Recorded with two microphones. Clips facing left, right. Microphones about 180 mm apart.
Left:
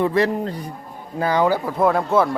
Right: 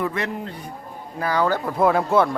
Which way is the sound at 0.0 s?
35° left (ahead or behind).